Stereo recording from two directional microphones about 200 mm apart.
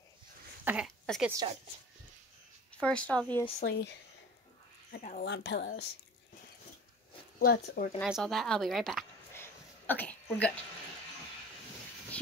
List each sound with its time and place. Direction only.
0.7 s speech: centre (ahead or behind)
2.7 s speech: 5° left (ahead or behind)
3.6 s speech: 60° left (ahead or behind)
4.9 s speech: 40° left (ahead or behind)
5.2 s speech: 60° left (ahead or behind)
7.3 s speech: 45° left (ahead or behind)
8.0 s speech: centre (ahead or behind)
9.3 s a sound: 10° left (ahead or behind)